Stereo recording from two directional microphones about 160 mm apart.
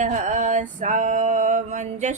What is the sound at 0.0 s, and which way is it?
Male singing, 50° right (ahead or behind).